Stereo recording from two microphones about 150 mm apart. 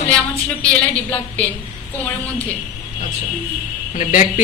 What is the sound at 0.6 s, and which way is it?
Speech, 10° left (ahead or behind).